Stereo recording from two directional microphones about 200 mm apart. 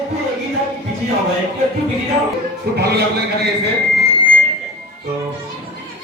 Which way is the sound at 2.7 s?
55° right (ahead or behind).